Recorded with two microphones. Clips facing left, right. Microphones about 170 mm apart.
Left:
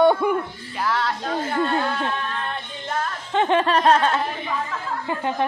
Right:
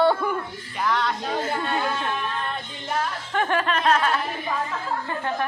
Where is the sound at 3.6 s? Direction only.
35° left (ahead or behind).